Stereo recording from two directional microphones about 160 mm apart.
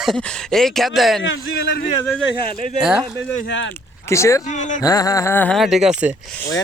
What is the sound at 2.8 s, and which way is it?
Speech, 5° right (ahead or behind).